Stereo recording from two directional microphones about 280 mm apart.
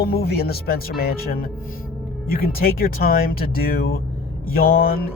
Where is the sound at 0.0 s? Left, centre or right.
Left.